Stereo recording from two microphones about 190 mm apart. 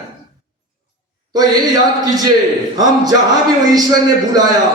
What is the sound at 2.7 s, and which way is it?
Speech, 20° right (ahead or behind).